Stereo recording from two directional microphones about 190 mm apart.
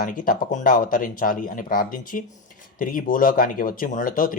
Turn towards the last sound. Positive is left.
turn(degrees=45)  # may be behind; listen again after turning